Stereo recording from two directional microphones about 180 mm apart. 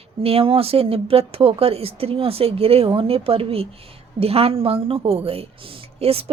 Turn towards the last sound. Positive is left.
turn(degrees=-35)  # may be behind; listen again after turning